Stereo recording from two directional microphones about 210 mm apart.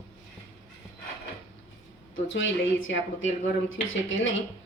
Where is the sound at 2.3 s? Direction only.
60° left (ahead or behind).